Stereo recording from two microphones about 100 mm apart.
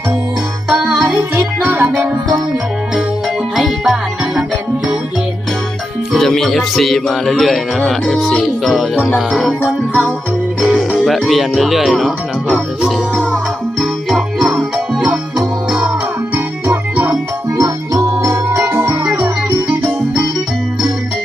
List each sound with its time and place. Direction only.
0.7 s music: 5° right (ahead or behind)
1.4 s music: 20° right (ahead or behind)
3.5 s music: 5° right (ahead or behind)
6.1 s speech: 5° left (ahead or behind)
10.6 s music: centre (ahead or behind); by 17.2 s 20° right (ahead or behind)
17.6 s music: 30° right (ahead or behind)